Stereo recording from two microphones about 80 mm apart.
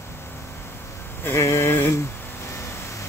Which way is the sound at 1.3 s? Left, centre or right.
Left.